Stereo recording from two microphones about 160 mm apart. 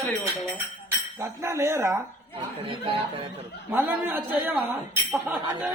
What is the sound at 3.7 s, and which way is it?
Speech, 15° right (ahead or behind).